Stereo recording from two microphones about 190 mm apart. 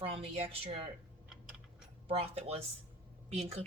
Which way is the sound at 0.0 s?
30° right (ahead or behind).